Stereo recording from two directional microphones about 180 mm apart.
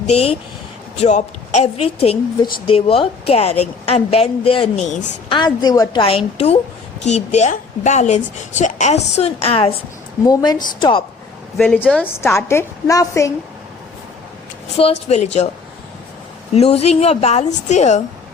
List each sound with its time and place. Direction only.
0.1 s a woman's voice: 35° left (ahead or behind)
5.4 s a woman's voice: 25° left (ahead or behind)
10.2 s a woman's voice: 20° left (ahead or behind)
11.5 s a woman's voice: 5° left (ahead or behind)
15.0 s a woman's voice: 35° left (ahead or behind)
16.6 s a woman's voice: 35° left (ahead or behind)